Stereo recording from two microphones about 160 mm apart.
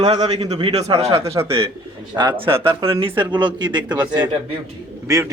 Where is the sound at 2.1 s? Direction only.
25° right (ahead or behind).